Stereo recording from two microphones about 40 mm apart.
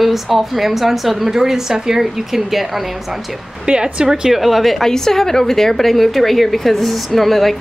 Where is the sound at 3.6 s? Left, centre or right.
Right.